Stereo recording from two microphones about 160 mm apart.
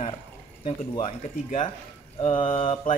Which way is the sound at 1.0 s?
45° left (ahead or behind).